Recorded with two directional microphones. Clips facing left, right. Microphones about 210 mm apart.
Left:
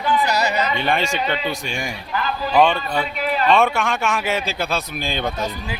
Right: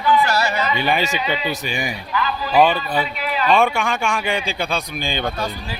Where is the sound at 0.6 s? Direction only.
5° right (ahead or behind).